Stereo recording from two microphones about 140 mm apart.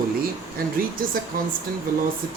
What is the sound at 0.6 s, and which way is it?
Speech, 90° right.